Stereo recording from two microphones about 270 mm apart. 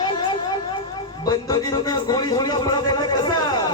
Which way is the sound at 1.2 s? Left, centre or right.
Centre.